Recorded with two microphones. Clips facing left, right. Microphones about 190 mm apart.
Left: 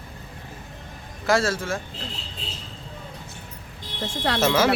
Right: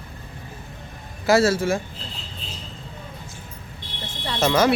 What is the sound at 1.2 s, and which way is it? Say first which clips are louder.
Speech: right 5 dB; 5° right (ahead or behind).